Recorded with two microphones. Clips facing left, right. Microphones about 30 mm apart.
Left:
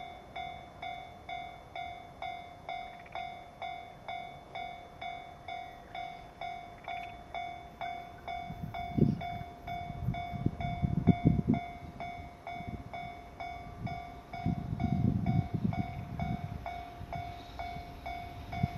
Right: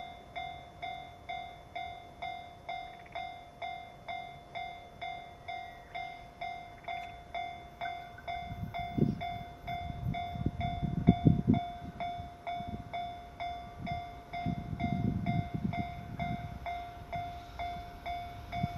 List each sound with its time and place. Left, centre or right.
0.3 s train: centre
2.2 s vehicle: centre
3.6 s train: centre
18.0 s train: centre